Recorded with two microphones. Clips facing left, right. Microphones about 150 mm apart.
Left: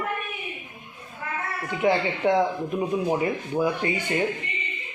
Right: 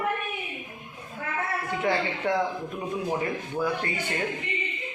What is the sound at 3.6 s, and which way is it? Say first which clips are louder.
Speech: left 4 dB; 15° left (ahead or behind).